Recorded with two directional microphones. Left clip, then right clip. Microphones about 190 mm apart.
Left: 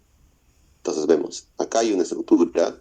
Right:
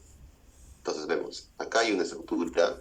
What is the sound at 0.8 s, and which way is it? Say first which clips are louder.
Speech: left 10 dB; 40° left (ahead or behind).